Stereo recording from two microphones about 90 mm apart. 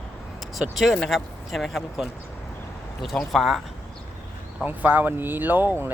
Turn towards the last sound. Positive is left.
turn(degrees=-20)  # may be behind; listen again after turning